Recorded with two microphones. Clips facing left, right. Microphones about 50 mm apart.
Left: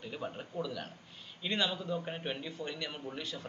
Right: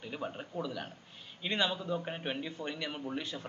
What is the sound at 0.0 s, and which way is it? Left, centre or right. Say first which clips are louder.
Speech: right 1 dB; centre.